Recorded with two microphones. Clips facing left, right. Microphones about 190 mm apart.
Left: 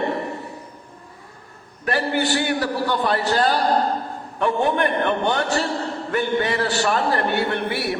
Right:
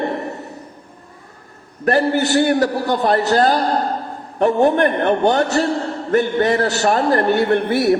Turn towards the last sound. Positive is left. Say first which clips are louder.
# right 8 dB
turn(degrees=-45)  # may be behind; listen again after turning